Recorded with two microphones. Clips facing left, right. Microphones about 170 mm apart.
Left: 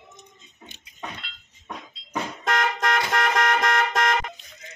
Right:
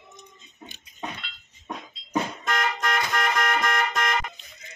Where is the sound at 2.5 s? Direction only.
80° left.